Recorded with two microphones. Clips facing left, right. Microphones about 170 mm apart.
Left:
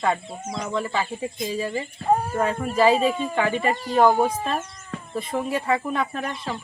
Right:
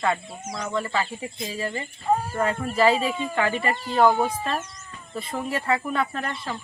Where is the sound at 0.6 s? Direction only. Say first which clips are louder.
Even; 5° left (ahead or behind).